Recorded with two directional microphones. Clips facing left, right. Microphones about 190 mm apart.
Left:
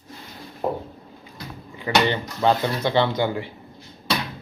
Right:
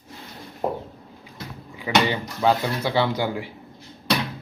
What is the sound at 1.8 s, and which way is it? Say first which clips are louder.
Speech: left 1 dB; 10° right (ahead or behind).